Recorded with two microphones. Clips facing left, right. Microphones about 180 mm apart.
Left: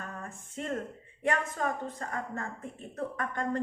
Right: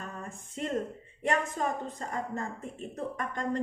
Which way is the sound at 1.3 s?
20° right (ahead or behind).